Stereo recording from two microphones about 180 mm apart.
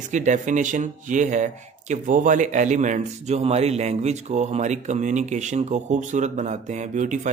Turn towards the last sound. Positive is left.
turn(degrees=-45)  # may be behind; listen again after turning